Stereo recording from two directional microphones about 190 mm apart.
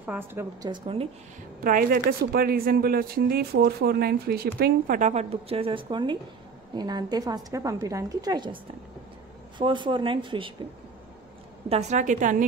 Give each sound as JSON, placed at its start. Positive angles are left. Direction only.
{"t": 0.0, "sound": "a woman's voice", "side_deg": -10}
{"t": 0.7, "sound": "a woman's voice", "side_deg": -30}
{"t": 1.6, "sound": "a woman's voice", "side_deg": -50}
{"t": 9.6, "sound": "a woman's voice", "side_deg": -25}
{"t": 11.7, "sound": "a woman's voice", "side_deg": -40}